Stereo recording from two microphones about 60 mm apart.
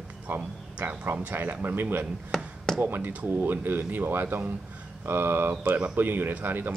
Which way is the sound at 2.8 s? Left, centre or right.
Right.